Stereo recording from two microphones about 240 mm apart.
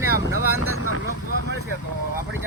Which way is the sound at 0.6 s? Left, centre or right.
Left.